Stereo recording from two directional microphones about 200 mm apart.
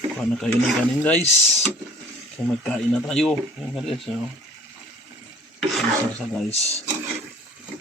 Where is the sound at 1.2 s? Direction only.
30° left (ahead or behind).